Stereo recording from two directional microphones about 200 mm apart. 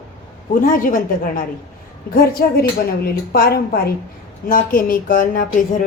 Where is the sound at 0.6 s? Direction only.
45° left (ahead or behind).